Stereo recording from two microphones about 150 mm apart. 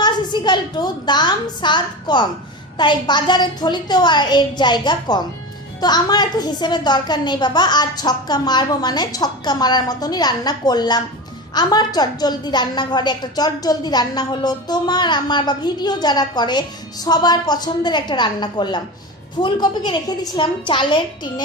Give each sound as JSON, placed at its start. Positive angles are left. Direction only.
{"t": 0.0, "sound": "a woman's voice", "side_deg": 30}